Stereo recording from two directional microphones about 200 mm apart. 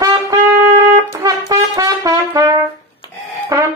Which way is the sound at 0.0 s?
20° right (ahead or behind).